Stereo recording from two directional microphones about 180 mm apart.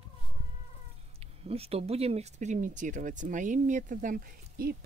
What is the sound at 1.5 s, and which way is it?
Speech, 35° right (ahead or behind).